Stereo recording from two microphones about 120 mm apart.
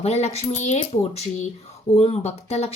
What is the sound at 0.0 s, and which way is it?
Speech, 65° left (ahead or behind).